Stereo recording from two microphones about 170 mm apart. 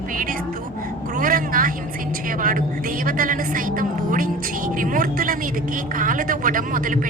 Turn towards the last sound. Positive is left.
turn(degrees=-50)  # may be behind; listen again after turning